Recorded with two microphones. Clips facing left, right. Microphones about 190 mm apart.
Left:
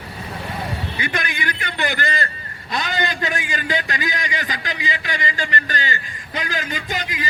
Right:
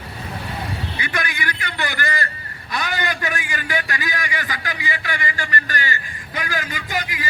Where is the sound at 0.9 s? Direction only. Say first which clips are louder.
Even; 25° left (ahead or behind).